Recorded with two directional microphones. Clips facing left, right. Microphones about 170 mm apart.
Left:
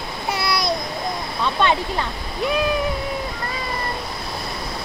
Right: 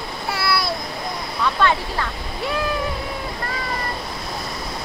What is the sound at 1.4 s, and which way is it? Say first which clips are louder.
Speech: even; 20° left (ahead or behind).